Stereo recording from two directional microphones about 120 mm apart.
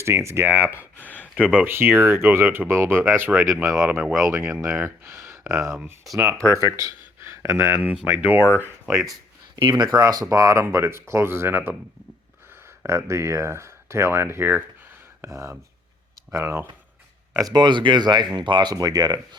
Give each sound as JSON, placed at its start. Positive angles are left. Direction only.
{"t": 0.0, "sound": "speech", "side_deg": -25}
{"t": 0.9, "sound": "a sound", "side_deg": 15}
{"t": 1.4, "sound": "speech", "side_deg": -10}
{"t": 3.9, "sound": "speech", "side_deg": -5}
{"t": 4.2, "sound": "speech", "side_deg": -20}
{"t": 8.9, "sound": "speech", "side_deg": 0}
{"t": 9.6, "sound": "speech", "side_deg": -40}
{"t": 13.1, "sound": "speech", "side_deg": -25}
{"t": 17.3, "sound": "speech", "side_deg": -30}